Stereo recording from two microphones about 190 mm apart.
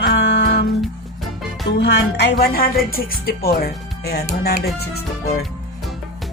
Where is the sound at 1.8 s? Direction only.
65° left (ahead or behind).